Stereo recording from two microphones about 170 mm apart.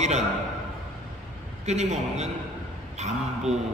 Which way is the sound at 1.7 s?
40° right (ahead or behind).